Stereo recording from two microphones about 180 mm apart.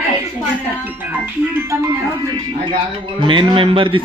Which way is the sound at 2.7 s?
25° right (ahead or behind).